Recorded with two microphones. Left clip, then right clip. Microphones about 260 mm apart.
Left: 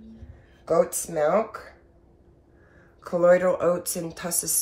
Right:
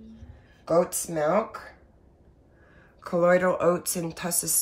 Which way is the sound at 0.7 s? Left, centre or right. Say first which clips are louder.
Left 1 dB; right.